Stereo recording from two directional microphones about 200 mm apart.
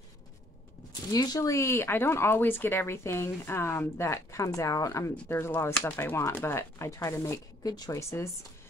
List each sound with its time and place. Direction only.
1.1 s speech: 20° left (ahead or behind)